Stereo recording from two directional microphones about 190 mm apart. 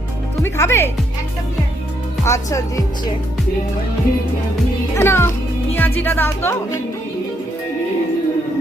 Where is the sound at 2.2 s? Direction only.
15° left (ahead or behind).